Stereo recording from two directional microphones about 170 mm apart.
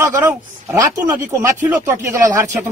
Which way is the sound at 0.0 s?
15° right (ahead or behind).